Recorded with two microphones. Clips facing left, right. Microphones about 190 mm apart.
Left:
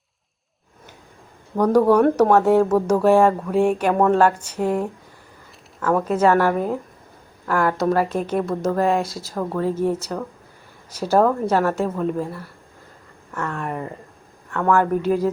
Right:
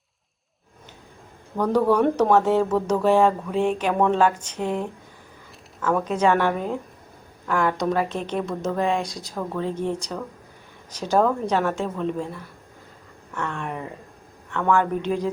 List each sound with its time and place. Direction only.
1.5 s speech: 10° left (ahead or behind)
5.8 s speech: 5° left (ahead or behind)